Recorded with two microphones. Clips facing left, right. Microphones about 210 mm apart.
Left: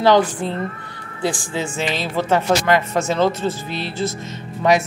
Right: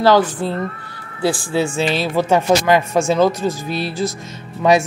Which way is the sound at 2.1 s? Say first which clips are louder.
Right 2 dB; 10° right (ahead or behind).